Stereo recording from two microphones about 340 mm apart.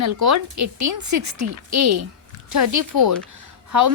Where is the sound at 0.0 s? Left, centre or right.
Right.